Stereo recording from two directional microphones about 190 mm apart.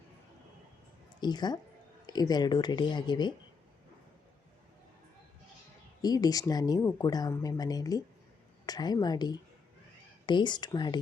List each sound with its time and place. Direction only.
1.2 s speech: 20° left (ahead or behind)
6.0 s speech: 20° left (ahead or behind)